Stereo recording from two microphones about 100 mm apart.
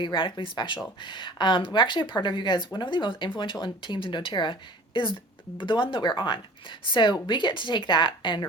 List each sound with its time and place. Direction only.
0.0 s speech: 55° left (ahead or behind)